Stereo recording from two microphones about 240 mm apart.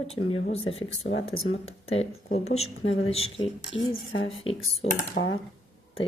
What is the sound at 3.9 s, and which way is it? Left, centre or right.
Speech, left.